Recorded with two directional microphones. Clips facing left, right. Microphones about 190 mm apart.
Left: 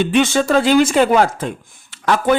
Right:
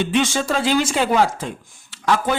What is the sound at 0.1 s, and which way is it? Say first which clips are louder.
Speech: left 5 dB; 60° left (ahead or behind).